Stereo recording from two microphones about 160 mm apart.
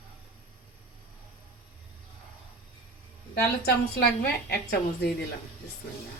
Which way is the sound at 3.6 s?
85° left.